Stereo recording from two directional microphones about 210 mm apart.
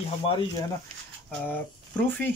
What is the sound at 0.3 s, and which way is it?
Speech, 20° left (ahead or behind).